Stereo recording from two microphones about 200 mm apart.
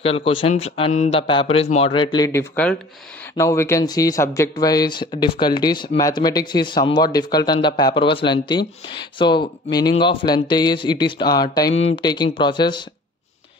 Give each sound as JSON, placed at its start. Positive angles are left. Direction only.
{"t": 0.0, "sound": "speech", "side_deg": 30}